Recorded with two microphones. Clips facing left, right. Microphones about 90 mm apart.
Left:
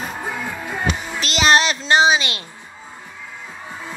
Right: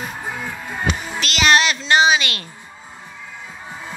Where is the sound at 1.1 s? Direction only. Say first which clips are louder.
Even; 30° left (ahead or behind).